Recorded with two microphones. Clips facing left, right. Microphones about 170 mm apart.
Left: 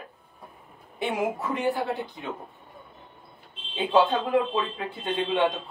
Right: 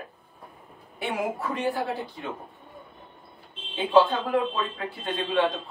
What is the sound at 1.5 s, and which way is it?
Speech, 20° left (ahead or behind).